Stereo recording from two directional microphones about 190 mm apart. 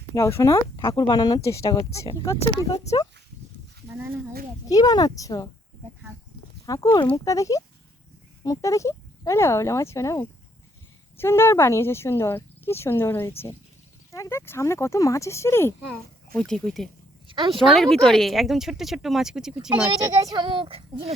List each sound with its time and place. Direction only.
0.1 s speech: 15° left (ahead or behind)
4.7 s speech: 20° left (ahead or behind)
6.7 s speech: 15° left (ahead or behind)
17.2 s a sound: 25° right (ahead or behind)
17.7 s speech: centre (ahead or behind)
20.2 s a child's voice: 25° right (ahead or behind)